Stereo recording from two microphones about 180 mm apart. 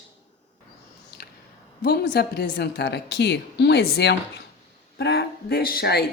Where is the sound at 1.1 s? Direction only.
60° left (ahead or behind).